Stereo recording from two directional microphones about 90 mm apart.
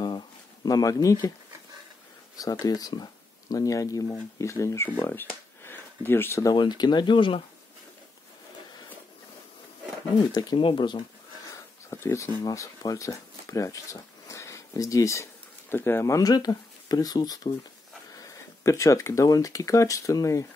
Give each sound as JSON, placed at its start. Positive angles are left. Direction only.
{"t": 0.7, "sound": "speech", "side_deg": 45}
{"t": 2.3, "sound": "speech", "side_deg": 45}
{"t": 5.0, "sound": "a sound", "side_deg": 25}
{"t": 6.4, "sound": "speech", "side_deg": 55}
{"t": 10.3, "sound": "speech", "side_deg": 50}
{"t": 10.6, "sound": "speech", "side_deg": 65}
{"t": 11.5, "sound": "a sound", "side_deg": 30}
{"t": 12.4, "sound": "speech", "side_deg": 40}
{"t": 15.7, "sound": "speech", "side_deg": 25}
{"t": 16.2, "sound": "speech", "side_deg": 45}
{"t": 18.1, "sound": "speech", "side_deg": 35}